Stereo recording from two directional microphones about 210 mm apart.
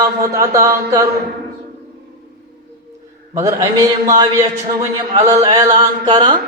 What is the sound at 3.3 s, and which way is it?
A man's voice, 15° right (ahead or behind).